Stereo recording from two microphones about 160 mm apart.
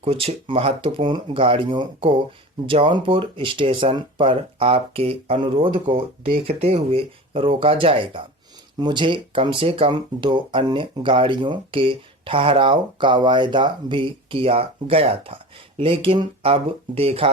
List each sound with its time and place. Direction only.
0.0 s speech: 40° right (ahead or behind)